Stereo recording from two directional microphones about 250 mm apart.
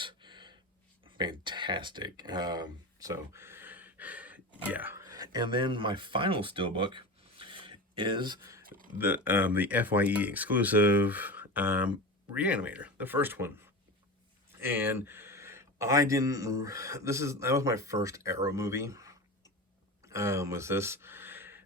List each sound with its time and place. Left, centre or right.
0.0 s gasp: centre
1.0 s speech: centre